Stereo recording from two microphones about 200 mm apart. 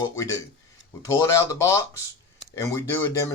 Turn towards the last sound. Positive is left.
turn(degrees=15)  # may be behind; listen again after turning